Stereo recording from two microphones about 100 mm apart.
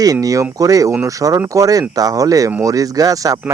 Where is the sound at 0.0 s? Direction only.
35° right (ahead or behind).